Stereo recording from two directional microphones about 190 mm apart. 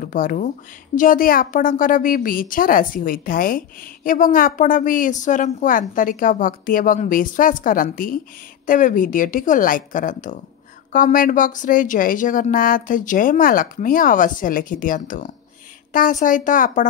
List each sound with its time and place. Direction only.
0.0 s a woman's voice: 45° left (ahead or behind)